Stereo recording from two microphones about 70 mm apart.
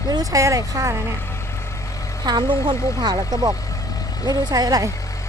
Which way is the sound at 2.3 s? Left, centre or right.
Right.